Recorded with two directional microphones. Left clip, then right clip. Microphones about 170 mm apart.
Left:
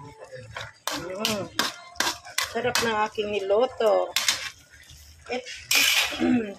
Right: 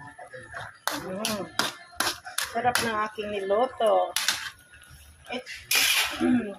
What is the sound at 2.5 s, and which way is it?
Speech, 15° left (ahead or behind).